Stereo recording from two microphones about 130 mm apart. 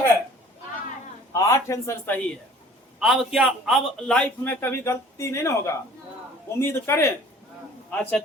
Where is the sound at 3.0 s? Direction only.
5° right (ahead or behind).